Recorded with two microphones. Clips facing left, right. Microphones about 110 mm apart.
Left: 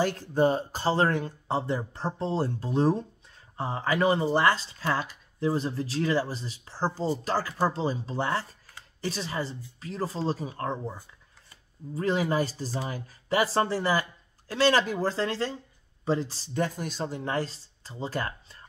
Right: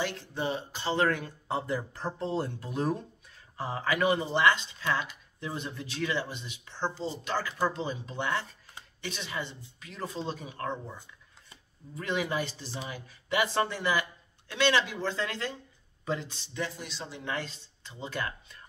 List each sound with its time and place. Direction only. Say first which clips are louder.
0.0 s speech: left 9 dB; 45° left (ahead or behind)